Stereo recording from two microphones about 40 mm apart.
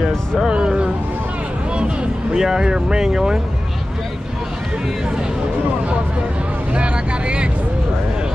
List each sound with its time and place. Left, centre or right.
0.5 s speech: right
2.3 s speech: centre
6.7 s vehicle: right